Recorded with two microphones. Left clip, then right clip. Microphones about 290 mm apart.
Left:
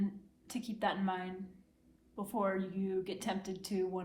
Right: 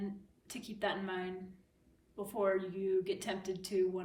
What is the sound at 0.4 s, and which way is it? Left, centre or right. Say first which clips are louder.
Speech: left 2 dB; centre.